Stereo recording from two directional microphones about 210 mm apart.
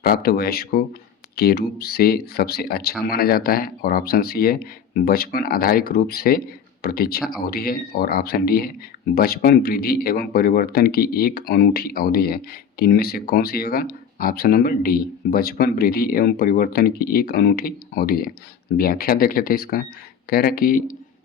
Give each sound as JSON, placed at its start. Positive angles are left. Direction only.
{"t": 0.0, "sound": "speech", "side_deg": 45}